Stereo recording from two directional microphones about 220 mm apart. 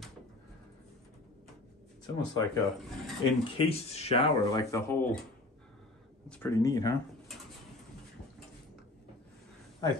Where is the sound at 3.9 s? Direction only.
30° left (ahead or behind).